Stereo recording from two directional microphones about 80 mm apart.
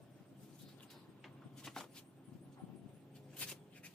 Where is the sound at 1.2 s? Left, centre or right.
Centre.